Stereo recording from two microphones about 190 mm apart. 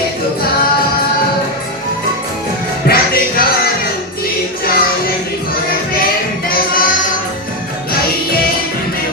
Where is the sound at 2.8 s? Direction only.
55° left (ahead or behind).